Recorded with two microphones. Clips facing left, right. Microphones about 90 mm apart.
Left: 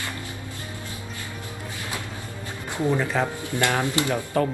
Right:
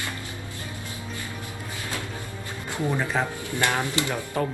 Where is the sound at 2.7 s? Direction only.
20° left (ahead or behind).